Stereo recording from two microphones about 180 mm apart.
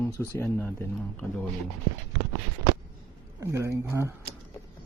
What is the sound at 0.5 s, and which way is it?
Speech, 15° left (ahead or behind).